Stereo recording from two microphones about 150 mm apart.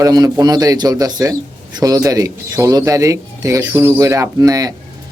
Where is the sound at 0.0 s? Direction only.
25° right (ahead or behind).